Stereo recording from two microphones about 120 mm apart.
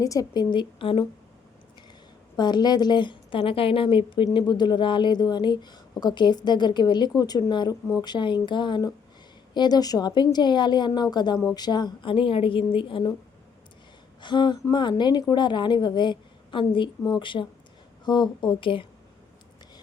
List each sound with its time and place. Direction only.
0.0 s speech: 30° left (ahead or behind)
2.3 s a woman's voice: 35° left (ahead or behind)
14.2 s speech: 40° left (ahead or behind)